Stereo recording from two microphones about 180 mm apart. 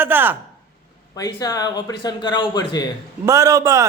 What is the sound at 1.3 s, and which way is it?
Speech, 20° left (ahead or behind).